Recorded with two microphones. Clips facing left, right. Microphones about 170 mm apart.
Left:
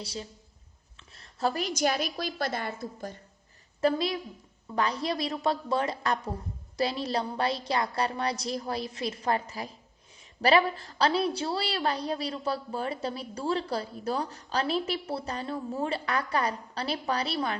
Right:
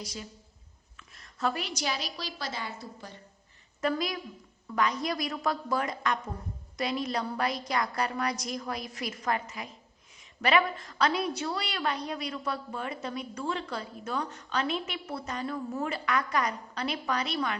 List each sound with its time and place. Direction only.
0.0 s a woman's voice: 30° left (ahead or behind); by 3.2 s 50° left (ahead or behind)
3.8 s a woman's voice: 30° left (ahead or behind)